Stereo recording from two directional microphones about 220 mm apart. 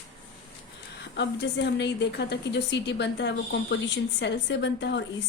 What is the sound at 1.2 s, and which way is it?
A woman's voice, 50° left (ahead or behind).